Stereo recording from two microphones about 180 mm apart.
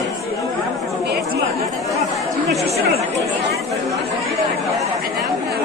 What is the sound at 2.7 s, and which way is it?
Chatter, 35° right (ahead or behind).